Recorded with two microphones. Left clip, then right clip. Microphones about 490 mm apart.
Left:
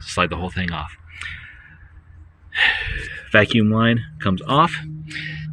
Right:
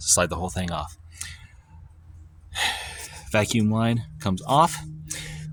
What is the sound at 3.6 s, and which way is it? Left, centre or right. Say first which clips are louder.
Speech: left 7 dB; right.